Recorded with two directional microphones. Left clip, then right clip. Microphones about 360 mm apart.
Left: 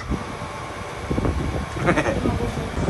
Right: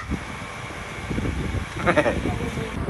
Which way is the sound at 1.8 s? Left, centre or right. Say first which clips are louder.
Right 1 dB; centre.